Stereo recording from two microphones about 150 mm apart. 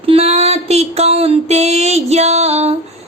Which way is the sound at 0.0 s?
40° right (ahead or behind).